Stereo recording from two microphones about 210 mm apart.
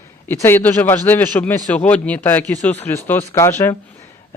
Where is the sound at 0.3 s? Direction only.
10° left (ahead or behind).